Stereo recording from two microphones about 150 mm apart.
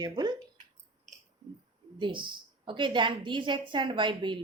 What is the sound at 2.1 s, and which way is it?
A woman's voice, 35° right (ahead or behind).